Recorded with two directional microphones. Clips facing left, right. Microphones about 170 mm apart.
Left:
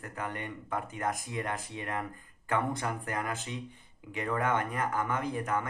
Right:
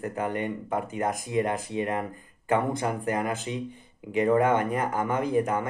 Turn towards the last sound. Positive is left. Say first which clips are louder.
# right 7 dB
turn(degrees=-20)  # may be behind; listen again after turning